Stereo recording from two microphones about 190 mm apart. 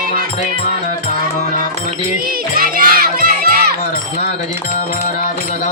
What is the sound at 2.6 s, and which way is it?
Music, 50° right (ahead or behind).